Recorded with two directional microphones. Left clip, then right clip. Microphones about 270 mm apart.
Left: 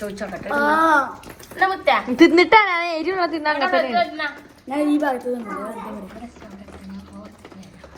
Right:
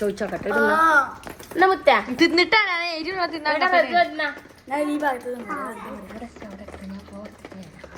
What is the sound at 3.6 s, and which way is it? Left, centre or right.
Speech, right.